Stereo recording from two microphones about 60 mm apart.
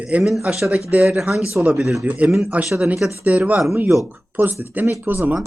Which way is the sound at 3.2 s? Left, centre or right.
Right.